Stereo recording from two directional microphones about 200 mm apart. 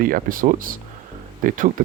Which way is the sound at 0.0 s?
45° right (ahead or behind).